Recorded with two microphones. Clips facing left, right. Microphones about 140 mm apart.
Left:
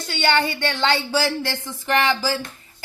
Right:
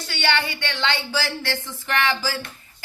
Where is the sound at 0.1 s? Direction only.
30° left (ahead or behind).